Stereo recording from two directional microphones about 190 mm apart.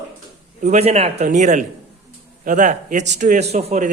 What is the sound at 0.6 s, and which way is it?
Speech, 35° right (ahead or behind).